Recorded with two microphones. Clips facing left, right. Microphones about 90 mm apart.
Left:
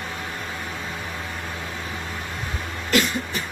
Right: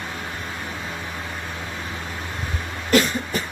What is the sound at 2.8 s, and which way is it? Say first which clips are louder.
Cough: right 3 dB; 40° right (ahead or behind).